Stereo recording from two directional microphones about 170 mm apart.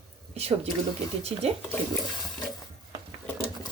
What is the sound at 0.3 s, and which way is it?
A woman's voice, 35° right (ahead or behind).